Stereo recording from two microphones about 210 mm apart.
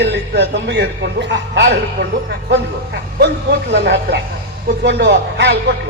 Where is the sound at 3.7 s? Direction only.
55° right (ahead or behind).